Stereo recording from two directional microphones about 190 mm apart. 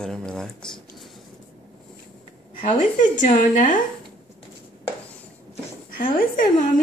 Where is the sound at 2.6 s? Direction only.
40° left (ahead or behind).